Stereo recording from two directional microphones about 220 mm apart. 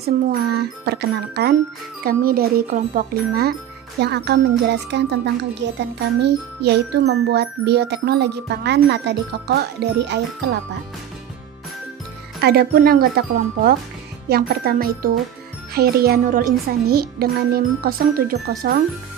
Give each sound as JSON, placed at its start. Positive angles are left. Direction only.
{"t": 0.0, "sound": "speech", "side_deg": -45}
{"t": 12.4, "sound": "speech", "side_deg": -45}
{"t": 14.3, "sound": "speech", "side_deg": -45}